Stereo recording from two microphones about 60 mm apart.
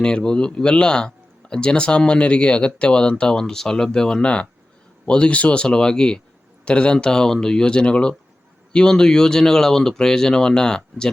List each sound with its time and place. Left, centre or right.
0.0 s speech: centre